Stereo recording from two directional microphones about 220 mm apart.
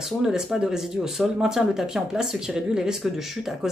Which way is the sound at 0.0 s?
Centre (ahead or behind).